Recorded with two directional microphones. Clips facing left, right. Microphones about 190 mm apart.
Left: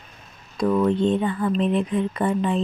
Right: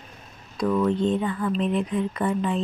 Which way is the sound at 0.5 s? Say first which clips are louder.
Left 2 dB; 30° left (ahead or behind).